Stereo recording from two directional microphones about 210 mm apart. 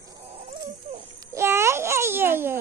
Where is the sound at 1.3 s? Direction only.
10° right (ahead or behind).